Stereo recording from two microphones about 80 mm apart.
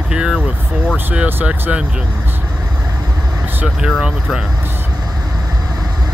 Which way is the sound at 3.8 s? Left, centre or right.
Centre.